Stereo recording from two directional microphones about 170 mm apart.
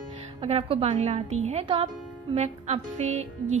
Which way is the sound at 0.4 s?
35° right (ahead or behind).